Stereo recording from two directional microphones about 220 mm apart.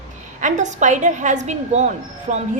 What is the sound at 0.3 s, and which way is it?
A woman's voice, 35° right (ahead or behind).